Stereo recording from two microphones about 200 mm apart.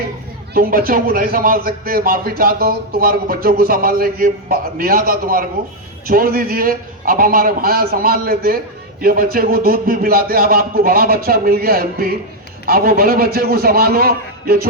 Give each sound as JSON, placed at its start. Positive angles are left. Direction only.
{"t": 0.5, "sound": "a man's voice", "side_deg": -50}